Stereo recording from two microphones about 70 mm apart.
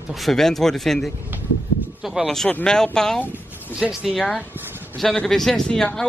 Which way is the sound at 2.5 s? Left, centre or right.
Centre.